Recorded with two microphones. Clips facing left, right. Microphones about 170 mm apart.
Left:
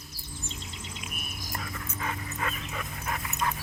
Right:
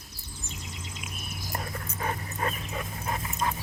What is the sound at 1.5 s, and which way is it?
Dog, 35° right (ahead or behind).